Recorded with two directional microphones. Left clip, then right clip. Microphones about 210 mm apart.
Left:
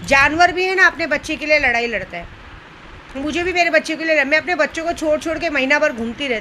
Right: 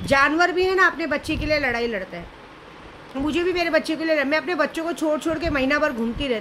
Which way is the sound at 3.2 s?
15° right (ahead or behind).